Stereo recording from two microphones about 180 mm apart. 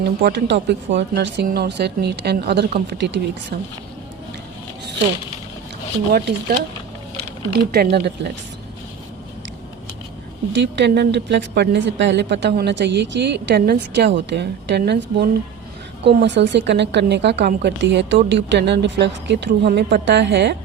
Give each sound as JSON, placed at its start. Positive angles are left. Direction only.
{"t": 0.0, "sound": "a woman's voice", "side_deg": -65}
{"t": 6.1, "sound": "speech", "side_deg": -55}
{"t": 10.5, "sound": "a woman's voice", "side_deg": -75}
{"t": 16.0, "sound": "a woman's voice", "side_deg": -80}